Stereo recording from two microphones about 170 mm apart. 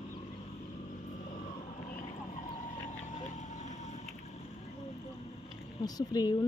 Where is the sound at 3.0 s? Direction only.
45° left (ahead or behind).